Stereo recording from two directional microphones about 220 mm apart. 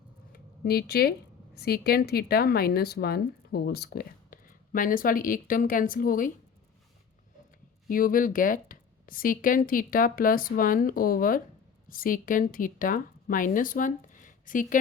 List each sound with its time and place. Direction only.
0.3 s a sound: 45° left (ahead or behind)
1.5 s speech: 45° left (ahead or behind)
7.9 s a woman's voice: 40° left (ahead or behind)